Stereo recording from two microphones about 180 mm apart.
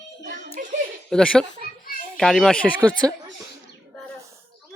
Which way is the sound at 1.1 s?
5° left (ahead or behind).